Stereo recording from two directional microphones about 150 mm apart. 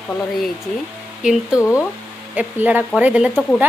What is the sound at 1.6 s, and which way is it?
Speech, 20° left (ahead or behind).